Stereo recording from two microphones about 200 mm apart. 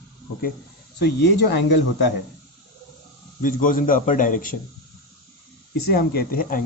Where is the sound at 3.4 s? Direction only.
45° left (ahead or behind).